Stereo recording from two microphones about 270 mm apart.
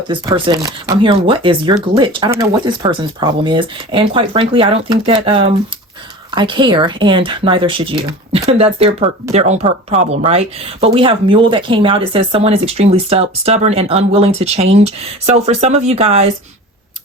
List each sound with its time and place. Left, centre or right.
0.1 s speech: centre